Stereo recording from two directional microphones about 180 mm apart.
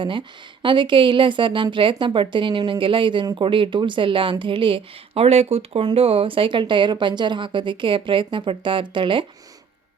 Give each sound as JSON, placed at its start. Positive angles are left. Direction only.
{"t": 0.0, "sound": "a woman's voice", "side_deg": -25}